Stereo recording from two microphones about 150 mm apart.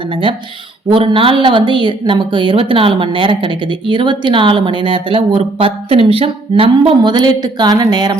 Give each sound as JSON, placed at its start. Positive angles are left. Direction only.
{"t": 0.1, "sound": "a woman's voice", "side_deg": -35}